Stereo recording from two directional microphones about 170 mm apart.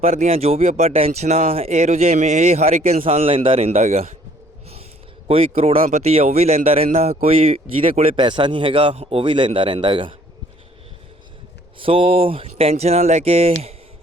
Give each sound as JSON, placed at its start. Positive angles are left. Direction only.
{"t": 0.0, "sound": "speech", "side_deg": -40}
{"t": 5.3, "sound": "speech", "side_deg": -35}
{"t": 11.8, "sound": "speech", "side_deg": -30}